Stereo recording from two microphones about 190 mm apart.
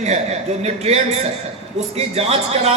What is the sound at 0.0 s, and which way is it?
A man's voice, 35° right (ahead or behind).